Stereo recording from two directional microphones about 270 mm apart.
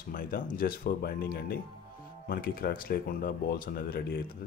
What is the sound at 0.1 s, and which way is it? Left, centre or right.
Speech, left.